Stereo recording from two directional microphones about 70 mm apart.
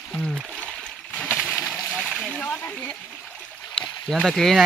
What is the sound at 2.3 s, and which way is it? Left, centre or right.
Speech, centre.